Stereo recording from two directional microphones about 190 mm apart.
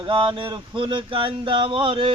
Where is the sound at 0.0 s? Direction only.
25° right (ahead or behind).